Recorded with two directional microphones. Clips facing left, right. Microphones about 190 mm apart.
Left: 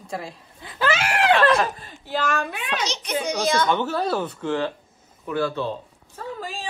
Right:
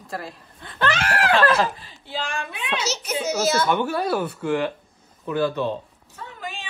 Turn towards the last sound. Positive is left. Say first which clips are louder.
# left 3 dB
turn(degrees=35)  # may be behind; listen again after turning